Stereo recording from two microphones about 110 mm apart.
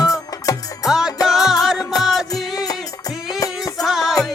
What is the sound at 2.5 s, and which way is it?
Music, 35° left (ahead or behind).